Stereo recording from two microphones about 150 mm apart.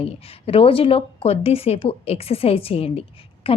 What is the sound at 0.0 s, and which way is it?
Speech, 40° left (ahead or behind).